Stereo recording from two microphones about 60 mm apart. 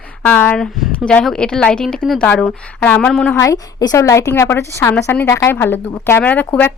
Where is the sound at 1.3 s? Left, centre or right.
Centre.